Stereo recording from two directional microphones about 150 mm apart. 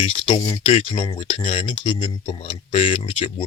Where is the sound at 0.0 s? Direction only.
35° left (ahead or behind).